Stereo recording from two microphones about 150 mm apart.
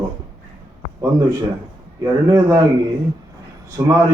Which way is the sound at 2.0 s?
20° right (ahead or behind).